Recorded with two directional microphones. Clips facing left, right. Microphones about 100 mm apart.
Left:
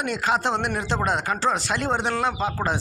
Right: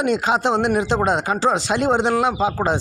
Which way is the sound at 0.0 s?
20° right (ahead or behind).